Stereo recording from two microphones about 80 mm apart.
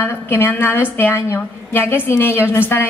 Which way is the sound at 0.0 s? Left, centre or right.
Left.